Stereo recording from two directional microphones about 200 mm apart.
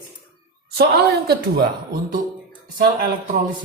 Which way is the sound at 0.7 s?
50° right (ahead or behind).